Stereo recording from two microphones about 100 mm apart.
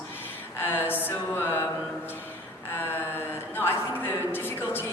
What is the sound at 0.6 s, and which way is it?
A capella, 20° left (ahead or behind).